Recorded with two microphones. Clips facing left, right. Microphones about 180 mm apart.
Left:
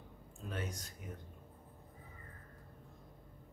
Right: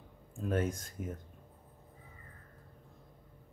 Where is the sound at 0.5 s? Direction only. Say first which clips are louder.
Right 10 dB; 50° right (ahead or behind).